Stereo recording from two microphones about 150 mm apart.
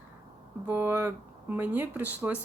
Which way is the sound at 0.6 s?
15° right (ahead or behind).